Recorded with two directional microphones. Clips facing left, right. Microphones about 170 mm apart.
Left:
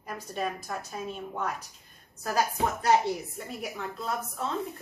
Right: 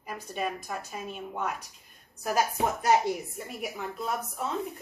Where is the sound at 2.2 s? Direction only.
15° right (ahead or behind).